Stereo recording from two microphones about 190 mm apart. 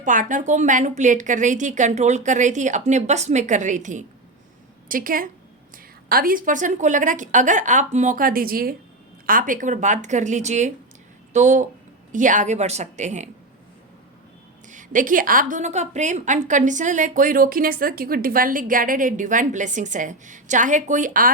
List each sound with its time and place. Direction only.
0.0 s a woman's voice: 45° right (ahead or behind)
14.7 s a woman's voice: 45° right (ahead or behind)